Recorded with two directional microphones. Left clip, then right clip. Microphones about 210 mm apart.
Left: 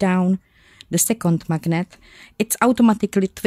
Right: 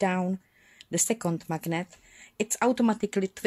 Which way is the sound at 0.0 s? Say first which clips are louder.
Left 6 dB; 20° left (ahead or behind).